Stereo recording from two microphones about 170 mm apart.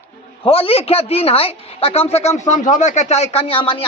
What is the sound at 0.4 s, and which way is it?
A man's voice, 35° left (ahead or behind).